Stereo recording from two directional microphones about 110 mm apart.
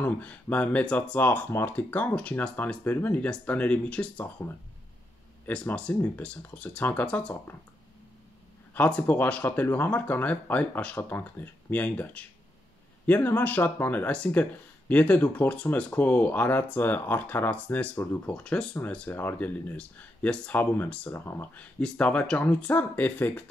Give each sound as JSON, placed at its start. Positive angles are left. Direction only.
{"t": 0.0, "sound": "speech", "side_deg": 15}
{"t": 5.5, "sound": "speech", "side_deg": 10}
{"t": 8.7, "sound": "speech", "side_deg": 15}
{"t": 21.7, "sound": "speech", "side_deg": 10}